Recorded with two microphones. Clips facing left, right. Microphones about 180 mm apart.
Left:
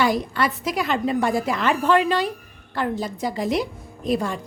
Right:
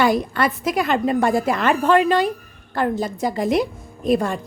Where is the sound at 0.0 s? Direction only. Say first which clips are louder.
Right 3 dB; 50° right (ahead or behind).